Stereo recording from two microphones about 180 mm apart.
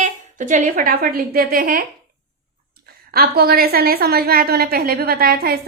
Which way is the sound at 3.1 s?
55° right (ahead or behind).